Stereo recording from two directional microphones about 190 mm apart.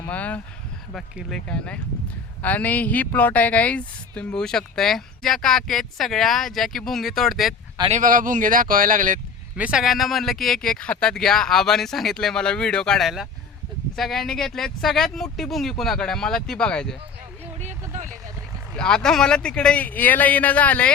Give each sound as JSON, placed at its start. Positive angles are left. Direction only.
{"t": 0.1, "sound": "a sound", "side_deg": 5}
{"t": 0.9, "sound": "speech", "side_deg": 0}
{"t": 7.9, "sound": "speech", "side_deg": -40}
{"t": 9.6, "sound": "speech", "side_deg": -5}
{"t": 17.6, "sound": "speech", "side_deg": -40}
{"t": 18.8, "sound": "speech", "side_deg": 5}